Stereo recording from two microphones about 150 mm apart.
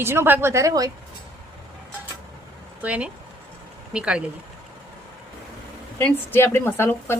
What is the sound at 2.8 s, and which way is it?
Speech, 10° right (ahead or behind).